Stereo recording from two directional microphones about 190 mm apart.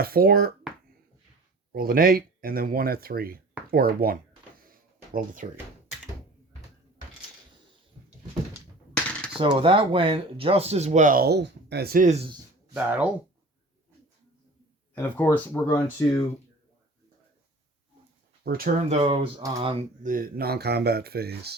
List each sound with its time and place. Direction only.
0.0 s speech: 50° right (ahead or behind)
1.7 s speech: 50° right (ahead or behind)
4.6 s a sound: 50° right (ahead or behind)
9.4 s speech: 30° right (ahead or behind)
12.7 s speech: 10° right (ahead or behind)
14.9 s speech: 10° left (ahead or behind)
18.4 s speech: 50° right (ahead or behind)
19.0 s mantra: 25° right (ahead or behind)
20.0 s speech: 45° right (ahead or behind)